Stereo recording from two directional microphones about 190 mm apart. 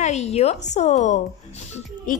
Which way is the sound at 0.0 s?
35° left (ahead or behind).